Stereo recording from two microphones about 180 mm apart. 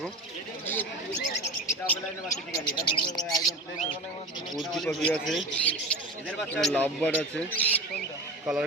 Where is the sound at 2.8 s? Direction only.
25° left (ahead or behind).